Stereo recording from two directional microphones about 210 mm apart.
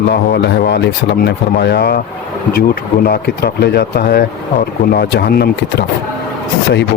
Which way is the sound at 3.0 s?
50° left (ahead or behind).